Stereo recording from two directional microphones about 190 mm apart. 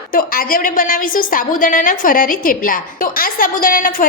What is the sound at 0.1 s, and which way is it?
A woman's voice, 50° left (ahead or behind).